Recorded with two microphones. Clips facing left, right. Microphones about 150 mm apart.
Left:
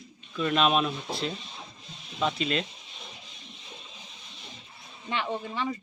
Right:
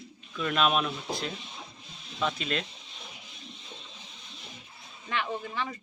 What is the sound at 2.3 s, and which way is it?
Speech, centre (ahead or behind).